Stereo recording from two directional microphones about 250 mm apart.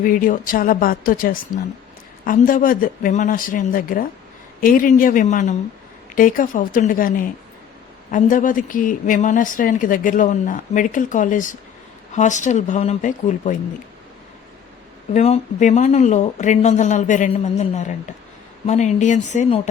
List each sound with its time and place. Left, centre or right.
0.0 s a woman's voice: left
15.1 s speech: left